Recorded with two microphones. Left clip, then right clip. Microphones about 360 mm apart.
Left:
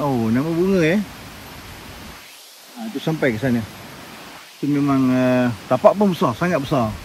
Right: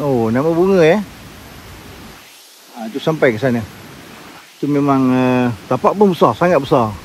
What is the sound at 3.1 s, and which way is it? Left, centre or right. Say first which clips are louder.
Speech: right 6 dB; right.